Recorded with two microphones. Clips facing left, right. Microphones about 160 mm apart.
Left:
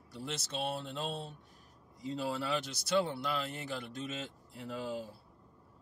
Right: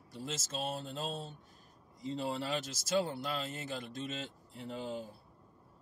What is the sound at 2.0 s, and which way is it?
Speech, centre (ahead or behind).